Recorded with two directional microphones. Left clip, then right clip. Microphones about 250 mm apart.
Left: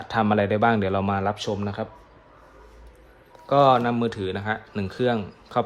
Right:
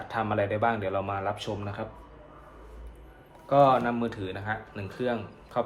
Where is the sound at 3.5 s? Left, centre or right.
Left.